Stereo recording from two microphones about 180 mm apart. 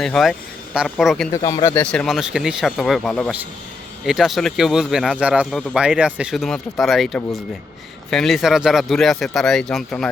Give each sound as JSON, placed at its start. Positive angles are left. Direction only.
{"t": 0.0, "sound": "speech", "side_deg": 0}
{"t": 1.3, "sound": "speech", "side_deg": 20}